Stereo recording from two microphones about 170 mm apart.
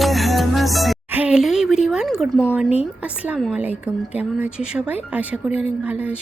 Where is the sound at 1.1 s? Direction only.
5° right (ahead or behind).